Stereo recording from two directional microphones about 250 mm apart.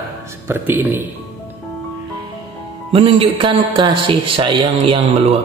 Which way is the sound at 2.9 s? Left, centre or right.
Right.